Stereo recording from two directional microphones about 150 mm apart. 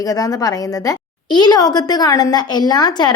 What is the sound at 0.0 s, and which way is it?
A woman's voice, 25° left (ahead or behind).